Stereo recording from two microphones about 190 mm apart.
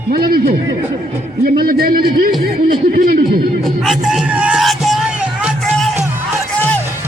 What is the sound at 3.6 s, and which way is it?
Music, centre (ahead or behind).